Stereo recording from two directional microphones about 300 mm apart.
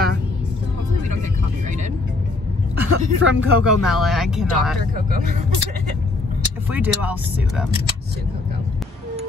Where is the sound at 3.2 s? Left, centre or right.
Right.